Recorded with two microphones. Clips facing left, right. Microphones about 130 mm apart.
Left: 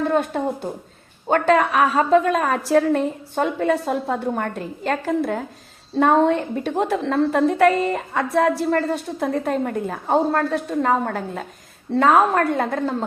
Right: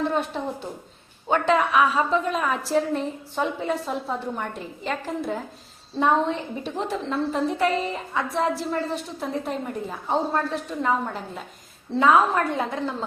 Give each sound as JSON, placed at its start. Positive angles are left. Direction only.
{"t": 0.1, "sound": "a woman's voice", "side_deg": 45}